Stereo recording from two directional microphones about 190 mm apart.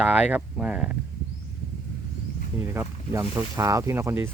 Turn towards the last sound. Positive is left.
turn(degrees=-10)  # may be behind; listen again after turning